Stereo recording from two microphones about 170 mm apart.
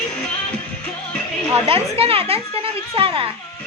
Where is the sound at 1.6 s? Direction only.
35° right (ahead or behind).